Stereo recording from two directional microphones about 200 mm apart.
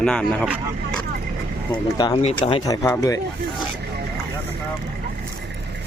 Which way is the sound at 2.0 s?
25° left (ahead or behind).